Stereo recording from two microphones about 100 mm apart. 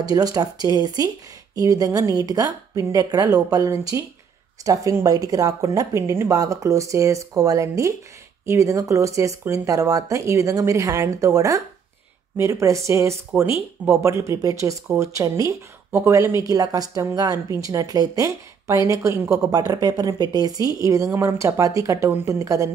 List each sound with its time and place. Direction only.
0.0 s speech: 40° right (ahead or behind)
19.5 s speech: 40° right (ahead or behind)